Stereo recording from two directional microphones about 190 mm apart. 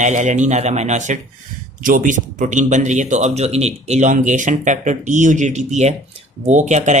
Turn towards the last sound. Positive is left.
turn(degrees=-40)  # may be behind; listen again after turning